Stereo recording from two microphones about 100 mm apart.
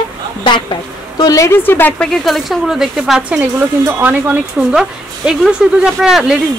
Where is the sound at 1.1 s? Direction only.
35° left (ahead or behind).